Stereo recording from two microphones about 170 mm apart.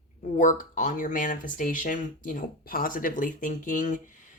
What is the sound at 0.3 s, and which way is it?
Speech, 50° left (ahead or behind).